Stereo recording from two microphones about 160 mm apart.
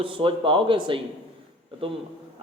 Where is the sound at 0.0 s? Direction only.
30° right (ahead or behind).